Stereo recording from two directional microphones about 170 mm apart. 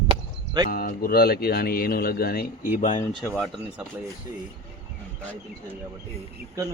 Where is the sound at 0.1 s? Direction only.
25° right (ahead or behind).